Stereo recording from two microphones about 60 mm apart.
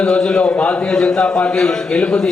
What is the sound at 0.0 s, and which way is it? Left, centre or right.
A man's voice, centre.